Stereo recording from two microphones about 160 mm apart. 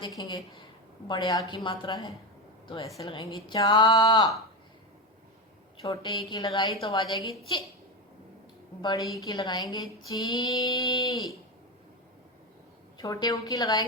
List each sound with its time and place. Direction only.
0.0 s a woman's voice: 25° left (ahead or behind)
5.8 s a woman's voice: 25° left (ahead or behind)
8.8 s a woman's voice: 25° left (ahead or behind)
13.0 s a woman's voice: 25° left (ahead or behind)